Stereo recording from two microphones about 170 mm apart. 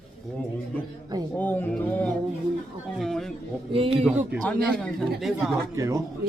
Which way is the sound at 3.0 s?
Centre (ahead or behind).